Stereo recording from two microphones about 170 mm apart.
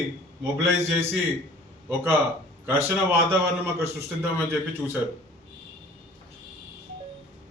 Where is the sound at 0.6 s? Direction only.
15° right (ahead or behind).